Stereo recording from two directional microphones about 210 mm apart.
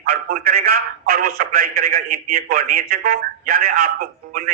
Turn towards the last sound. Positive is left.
turn(degrees=-40)  # may be behind; listen again after turning